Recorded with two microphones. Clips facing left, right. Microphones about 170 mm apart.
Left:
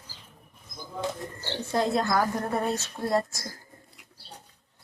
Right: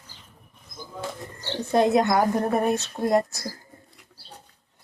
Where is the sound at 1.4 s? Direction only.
20° right (ahead or behind).